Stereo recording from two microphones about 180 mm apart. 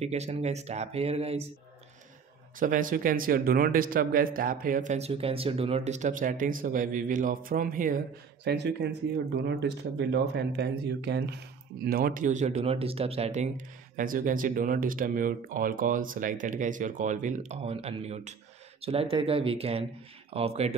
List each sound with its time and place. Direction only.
0.0 s speech: 35° right (ahead or behind)
2.6 s speech: 50° right (ahead or behind)
8.5 s speech: 70° right (ahead or behind); by 20.7 s 35° right (ahead or behind)